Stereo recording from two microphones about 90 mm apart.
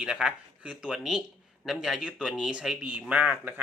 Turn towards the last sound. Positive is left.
turn(degrees=-15)  # may be behind; listen again after turning